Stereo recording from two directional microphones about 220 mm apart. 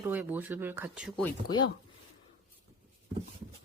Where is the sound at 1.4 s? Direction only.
20° left (ahead or behind).